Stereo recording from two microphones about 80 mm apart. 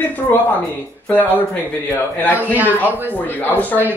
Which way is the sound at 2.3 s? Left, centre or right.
Right.